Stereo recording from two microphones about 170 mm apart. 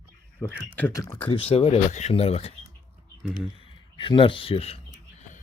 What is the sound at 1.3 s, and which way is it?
Speech, 35° left (ahead or behind).